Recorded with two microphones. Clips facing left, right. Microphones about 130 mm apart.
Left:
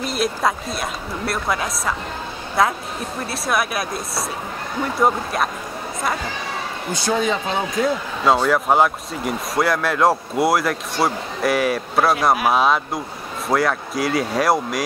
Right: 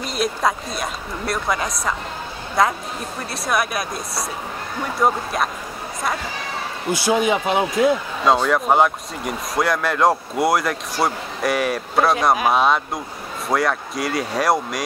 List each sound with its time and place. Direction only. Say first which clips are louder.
0.0 s speech: even; centre (ahead or behind)
6.9 s speech: right 3 dB; 10° right (ahead or behind)
8.3 s speech: even; centre (ahead or behind)